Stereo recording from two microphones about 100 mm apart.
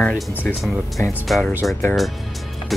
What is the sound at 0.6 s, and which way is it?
Speech, centre (ahead or behind).